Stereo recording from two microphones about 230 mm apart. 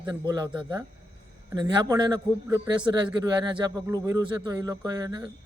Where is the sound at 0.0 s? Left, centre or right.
Centre.